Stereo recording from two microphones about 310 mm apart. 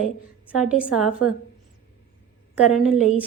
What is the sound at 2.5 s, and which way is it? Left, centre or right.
Speech, centre.